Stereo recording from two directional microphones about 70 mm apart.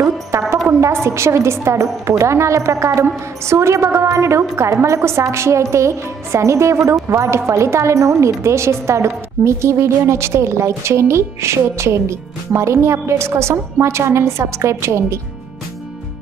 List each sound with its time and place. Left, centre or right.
0.0 s music: right
0.7 s a woman's voice: right